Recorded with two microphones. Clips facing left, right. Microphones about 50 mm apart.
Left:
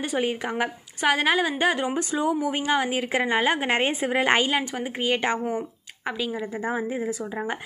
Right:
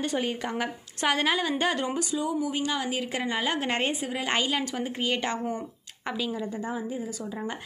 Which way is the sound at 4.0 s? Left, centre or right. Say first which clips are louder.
Left 7 dB; left.